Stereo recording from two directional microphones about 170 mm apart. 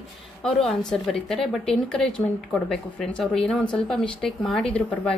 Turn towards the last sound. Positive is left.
turn(degrees=5)  # may be behind; listen again after turning